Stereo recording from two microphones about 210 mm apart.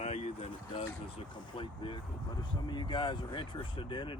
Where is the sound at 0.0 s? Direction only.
30° left (ahead or behind).